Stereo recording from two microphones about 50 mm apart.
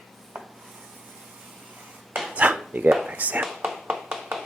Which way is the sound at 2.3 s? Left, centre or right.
Right.